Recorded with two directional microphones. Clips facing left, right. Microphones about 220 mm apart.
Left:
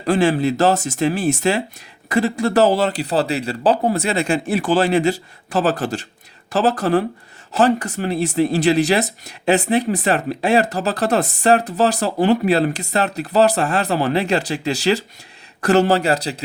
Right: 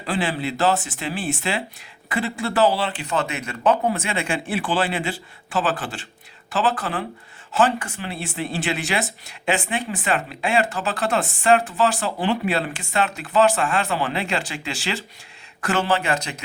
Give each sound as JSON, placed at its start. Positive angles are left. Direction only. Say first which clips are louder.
{"t": 0.0, "sound": "speech", "louder": "left 8 dB", "side_deg": 45}